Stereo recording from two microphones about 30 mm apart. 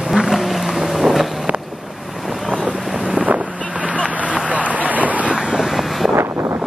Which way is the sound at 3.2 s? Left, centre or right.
Right.